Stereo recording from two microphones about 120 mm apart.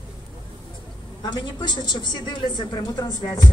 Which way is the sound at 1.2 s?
40° left (ahead or behind).